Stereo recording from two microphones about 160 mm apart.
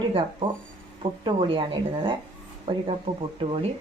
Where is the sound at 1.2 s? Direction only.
35° right (ahead or behind).